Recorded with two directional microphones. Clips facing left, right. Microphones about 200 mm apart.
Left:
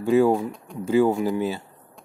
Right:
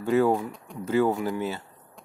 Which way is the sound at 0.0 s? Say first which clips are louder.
Left 4 dB; 15° left (ahead or behind).